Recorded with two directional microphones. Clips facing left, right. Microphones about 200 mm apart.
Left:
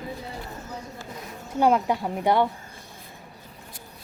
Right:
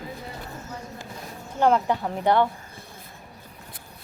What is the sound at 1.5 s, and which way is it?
Speech, 10° left (ahead or behind).